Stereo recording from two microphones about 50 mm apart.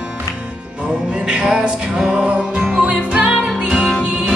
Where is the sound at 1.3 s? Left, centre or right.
Right.